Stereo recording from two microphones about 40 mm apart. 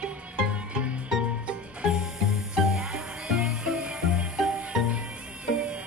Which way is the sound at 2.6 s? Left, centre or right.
Centre.